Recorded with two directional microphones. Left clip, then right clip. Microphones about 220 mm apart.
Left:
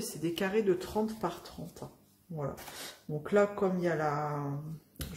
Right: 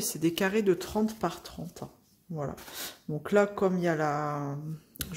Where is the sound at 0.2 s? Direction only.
45° right (ahead or behind).